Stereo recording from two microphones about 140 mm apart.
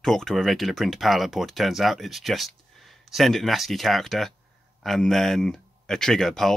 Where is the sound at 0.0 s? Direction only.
5° left (ahead or behind).